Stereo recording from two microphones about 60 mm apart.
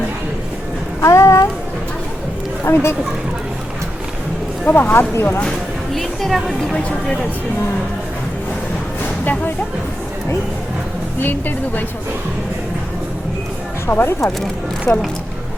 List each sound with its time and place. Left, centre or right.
1.0 s a sound: left
2.6 s speech: left
4.6 s speech: left
5.9 s speech: centre
6.7 s speech: centre
11.2 s speech: left
13.9 s speech: left
14.9 s speech: centre